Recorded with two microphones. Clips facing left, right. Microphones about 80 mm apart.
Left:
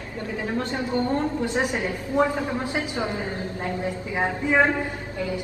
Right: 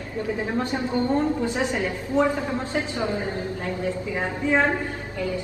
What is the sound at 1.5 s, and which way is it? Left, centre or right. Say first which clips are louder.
Speech: even; centre.